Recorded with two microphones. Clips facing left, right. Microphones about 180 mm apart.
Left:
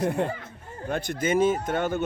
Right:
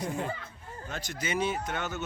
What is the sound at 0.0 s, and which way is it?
Speech, 60° left (ahead or behind).